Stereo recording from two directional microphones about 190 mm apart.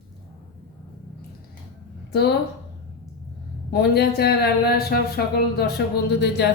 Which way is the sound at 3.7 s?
60° left (ahead or behind).